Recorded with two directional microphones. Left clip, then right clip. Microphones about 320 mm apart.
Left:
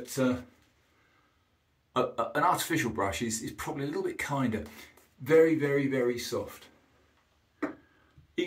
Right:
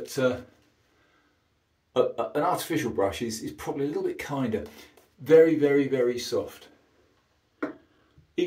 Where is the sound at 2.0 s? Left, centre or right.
Centre.